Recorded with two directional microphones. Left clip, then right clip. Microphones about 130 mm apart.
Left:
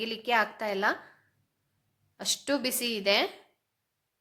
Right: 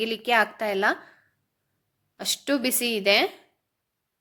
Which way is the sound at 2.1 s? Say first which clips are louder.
Right 4 dB; 25° right (ahead or behind).